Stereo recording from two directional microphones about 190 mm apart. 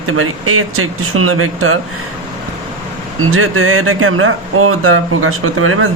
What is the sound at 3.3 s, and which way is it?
Speech, 90° right.